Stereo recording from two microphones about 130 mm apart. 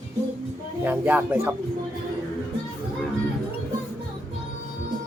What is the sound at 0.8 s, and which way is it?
Speech, 10° right (ahead or behind).